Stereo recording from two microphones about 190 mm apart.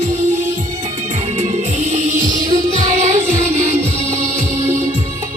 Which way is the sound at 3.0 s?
40° right (ahead or behind).